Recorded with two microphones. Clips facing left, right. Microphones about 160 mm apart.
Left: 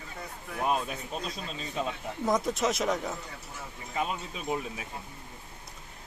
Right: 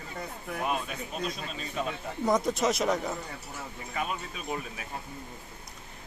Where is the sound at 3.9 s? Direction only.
20° left (ahead or behind).